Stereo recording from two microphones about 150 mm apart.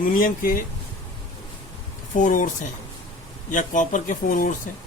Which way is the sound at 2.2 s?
60° left (ahead or behind).